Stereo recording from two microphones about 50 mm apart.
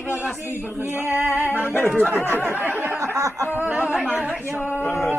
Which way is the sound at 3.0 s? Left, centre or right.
Right.